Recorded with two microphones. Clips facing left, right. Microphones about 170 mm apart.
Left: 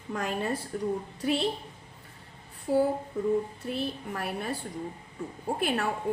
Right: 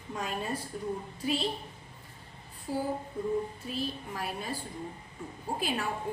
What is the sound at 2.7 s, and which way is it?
A woman's voice, 60° left (ahead or behind).